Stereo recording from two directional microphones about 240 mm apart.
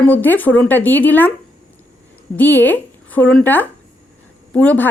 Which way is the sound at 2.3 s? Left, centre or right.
Centre.